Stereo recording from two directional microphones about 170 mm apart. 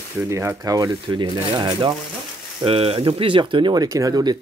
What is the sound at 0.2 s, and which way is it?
Speech, 15° right (ahead or behind).